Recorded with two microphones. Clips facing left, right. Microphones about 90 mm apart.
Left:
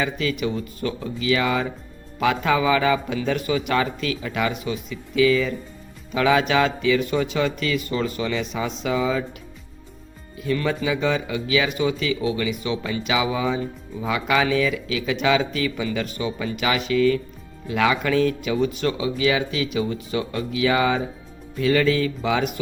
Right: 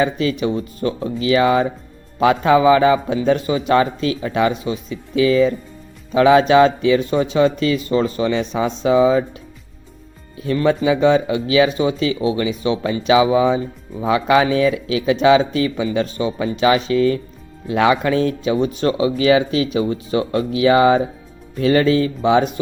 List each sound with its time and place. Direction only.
0.0 s speech: 30° right (ahead or behind)
10.4 s speech: 30° right (ahead or behind)